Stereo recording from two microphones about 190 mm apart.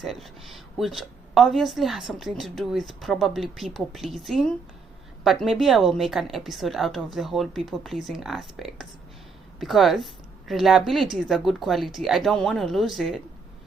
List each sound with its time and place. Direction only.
0.0 s a woman's voice: centre (ahead or behind)